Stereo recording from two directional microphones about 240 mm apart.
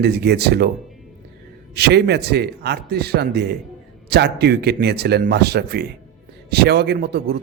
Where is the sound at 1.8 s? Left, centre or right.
Right.